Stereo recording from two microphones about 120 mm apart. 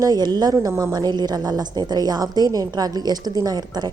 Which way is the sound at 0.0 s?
35° right (ahead or behind).